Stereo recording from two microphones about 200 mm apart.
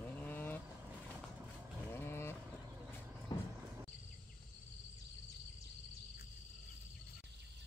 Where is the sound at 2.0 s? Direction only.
10° left (ahead or behind).